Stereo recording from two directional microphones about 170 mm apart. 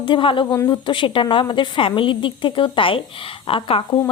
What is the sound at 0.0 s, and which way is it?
A woman's voice, 30° left (ahead or behind).